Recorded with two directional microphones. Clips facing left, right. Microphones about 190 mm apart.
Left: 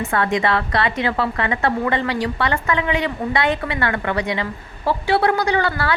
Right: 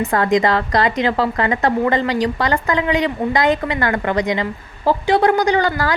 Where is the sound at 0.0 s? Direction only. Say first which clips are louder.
Right 4 dB; 35° right (ahead or behind).